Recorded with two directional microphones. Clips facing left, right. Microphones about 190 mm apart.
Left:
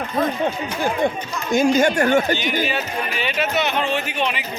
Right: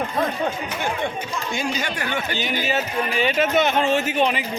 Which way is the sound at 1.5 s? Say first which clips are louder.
Left 13 dB; 45° left (ahead or behind).